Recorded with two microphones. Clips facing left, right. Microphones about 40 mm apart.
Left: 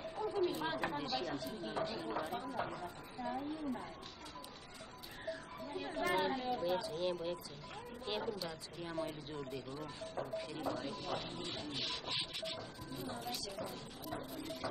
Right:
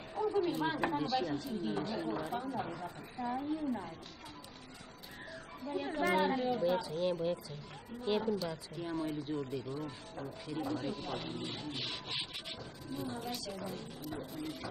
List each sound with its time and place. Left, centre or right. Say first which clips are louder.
0.5 s a sound: right 5 dB; centre
1.0 s a woman's voice: right 5 dB; centre
3.2 s speech: right 5 dB; centre
5.8 s speech: right 5 dB; right
6.0 s a woman's voice: right 4 dB; centre